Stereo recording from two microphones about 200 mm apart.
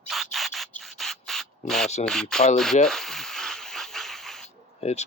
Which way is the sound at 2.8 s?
Centre (ahead or behind).